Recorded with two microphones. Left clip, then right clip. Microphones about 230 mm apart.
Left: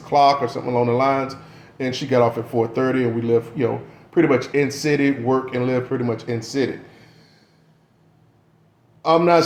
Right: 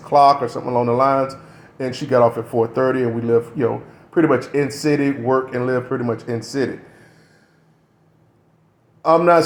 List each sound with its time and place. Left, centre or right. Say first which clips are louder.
0.0 s speech: right 3 dB; right
9.0 s a man's voice: right 2 dB; right